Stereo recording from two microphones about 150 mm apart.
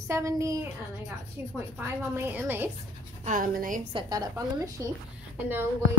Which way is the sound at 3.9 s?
25° right (ahead or behind).